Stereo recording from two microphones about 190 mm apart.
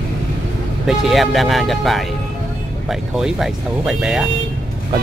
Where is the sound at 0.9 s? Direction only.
Centre (ahead or behind).